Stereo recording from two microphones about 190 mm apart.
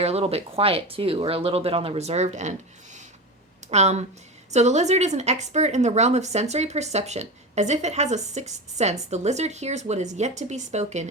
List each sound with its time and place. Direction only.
0.0 s speech: 35° right (ahead or behind)
3.7 s speech: 35° right (ahead or behind)